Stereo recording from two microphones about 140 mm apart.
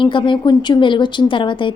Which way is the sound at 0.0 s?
35° left (ahead or behind).